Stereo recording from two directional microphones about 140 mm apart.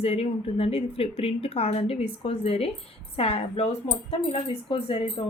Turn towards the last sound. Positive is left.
turn(degrees=45)  # may be behind; listen again after turning